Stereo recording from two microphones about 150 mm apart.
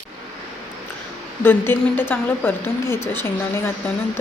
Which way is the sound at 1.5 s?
15° left (ahead or behind).